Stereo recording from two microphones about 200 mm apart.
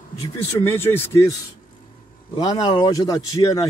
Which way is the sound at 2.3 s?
25° left (ahead or behind).